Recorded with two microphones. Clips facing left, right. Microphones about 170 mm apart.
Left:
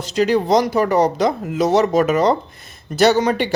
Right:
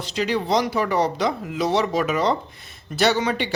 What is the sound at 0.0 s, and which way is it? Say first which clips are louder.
Speech: left 7 dB; 45° left (ahead or behind).